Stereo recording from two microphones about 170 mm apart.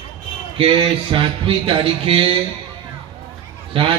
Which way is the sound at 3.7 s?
30° right (ahead or behind).